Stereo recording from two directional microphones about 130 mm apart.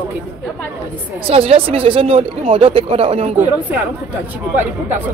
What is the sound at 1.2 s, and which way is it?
Speech, 45° right (ahead or behind).